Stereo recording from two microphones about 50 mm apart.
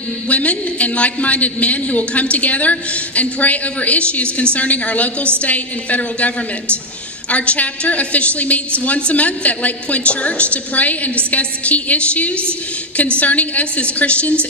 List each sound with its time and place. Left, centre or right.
0.3 s a man's voice: left